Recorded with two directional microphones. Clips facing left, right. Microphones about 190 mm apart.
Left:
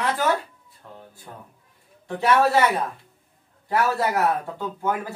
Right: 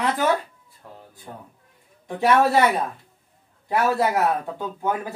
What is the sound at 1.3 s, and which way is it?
Speech, 25° right (ahead or behind).